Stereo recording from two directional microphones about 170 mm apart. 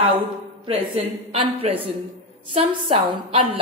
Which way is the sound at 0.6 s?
35° right (ahead or behind).